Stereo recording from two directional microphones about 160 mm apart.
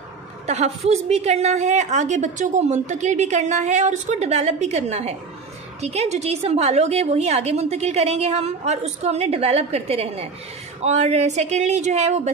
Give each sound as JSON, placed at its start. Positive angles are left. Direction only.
{"t": 0.5, "sound": "a woman's voice", "side_deg": -45}